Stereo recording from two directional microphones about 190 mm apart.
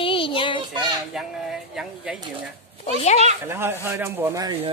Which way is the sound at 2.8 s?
35° left (ahead or behind).